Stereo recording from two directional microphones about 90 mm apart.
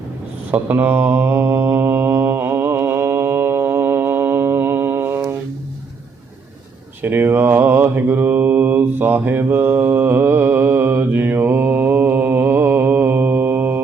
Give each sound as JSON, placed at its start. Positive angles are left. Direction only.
{"t": 0.5, "sound": "mantra", "side_deg": -25}
{"t": 7.0, "sound": "mantra", "side_deg": -20}